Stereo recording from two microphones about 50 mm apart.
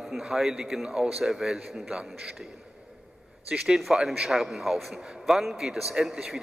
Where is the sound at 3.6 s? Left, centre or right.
Centre.